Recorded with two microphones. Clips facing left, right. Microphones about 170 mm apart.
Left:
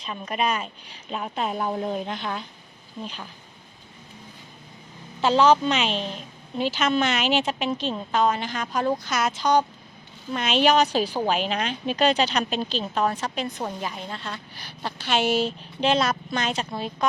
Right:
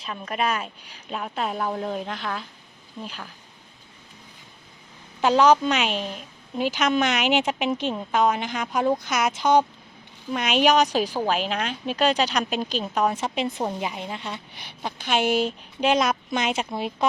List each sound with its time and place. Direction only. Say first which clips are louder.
0.0 s speech: even; centre (ahead or behind)
5.2 s a woman's voice: right 1 dB; 10° right (ahead or behind)
10.3 s a woman's voice: even; 10° right (ahead or behind)
11.2 s a woman's voice: even; centre (ahead or behind)
13.1 s a woman's voice: right 3 dB; 20° right (ahead or behind)